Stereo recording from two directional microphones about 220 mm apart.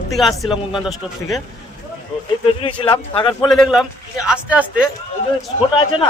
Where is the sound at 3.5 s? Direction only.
Centre (ahead or behind).